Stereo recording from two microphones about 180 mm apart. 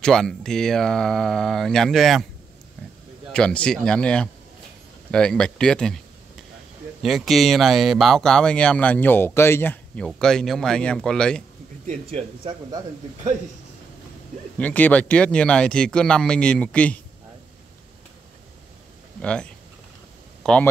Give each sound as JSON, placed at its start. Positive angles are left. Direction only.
{"t": 0.0, "sound": "speech", "side_deg": 0}
{"t": 3.3, "sound": "speech", "side_deg": 5}
{"t": 7.0, "sound": "speech", "side_deg": 0}
{"t": 11.8, "sound": "speech", "side_deg": -40}
{"t": 14.6, "sound": "speech", "side_deg": 10}
{"t": 19.2, "sound": "speech", "side_deg": 5}